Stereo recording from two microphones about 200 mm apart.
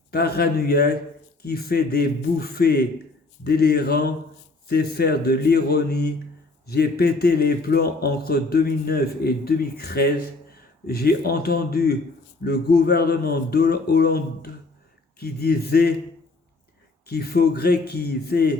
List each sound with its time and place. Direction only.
0.1 s a man's voice: 50° left (ahead or behind)
15.2 s a man's voice: 50° left (ahead or behind)
17.1 s a man's voice: 50° left (ahead or behind)